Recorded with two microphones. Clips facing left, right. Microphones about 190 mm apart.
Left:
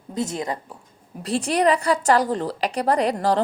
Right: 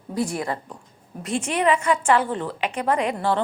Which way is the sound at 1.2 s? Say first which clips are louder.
Left 2 dB; 35° left (ahead or behind).